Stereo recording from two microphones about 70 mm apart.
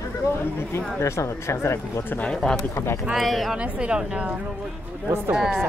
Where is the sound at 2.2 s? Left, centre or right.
Centre.